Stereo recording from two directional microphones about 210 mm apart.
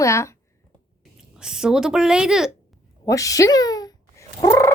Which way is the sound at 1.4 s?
5° right (ahead or behind).